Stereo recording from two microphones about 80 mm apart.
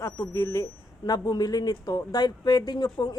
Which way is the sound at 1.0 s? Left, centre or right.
Left.